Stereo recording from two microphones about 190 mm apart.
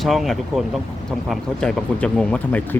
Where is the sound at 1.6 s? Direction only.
5° left (ahead or behind).